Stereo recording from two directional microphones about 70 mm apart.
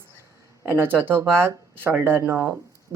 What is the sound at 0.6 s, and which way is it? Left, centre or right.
Speech, right.